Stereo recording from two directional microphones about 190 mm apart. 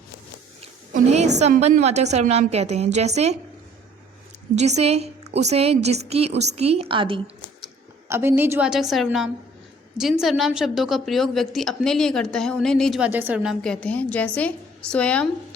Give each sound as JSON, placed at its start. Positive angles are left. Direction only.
{"t": 0.9, "sound": "a woman's voice", "side_deg": -35}
{"t": 4.5, "sound": "a woman's voice", "side_deg": -35}
{"t": 8.0, "sound": "a woman's voice", "side_deg": -15}